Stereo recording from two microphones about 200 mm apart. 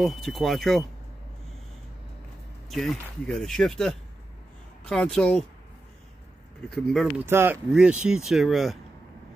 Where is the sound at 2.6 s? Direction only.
Centre (ahead or behind).